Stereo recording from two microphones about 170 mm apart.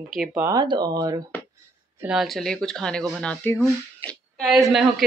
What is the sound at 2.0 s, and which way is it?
A woman's voice, 5° right (ahead or behind).